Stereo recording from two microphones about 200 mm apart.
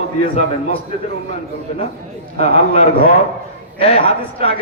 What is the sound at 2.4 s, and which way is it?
A man's voice, 35° left (ahead or behind).